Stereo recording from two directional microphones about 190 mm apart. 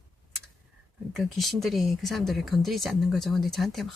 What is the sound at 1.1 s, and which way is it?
Speech, centre (ahead or behind).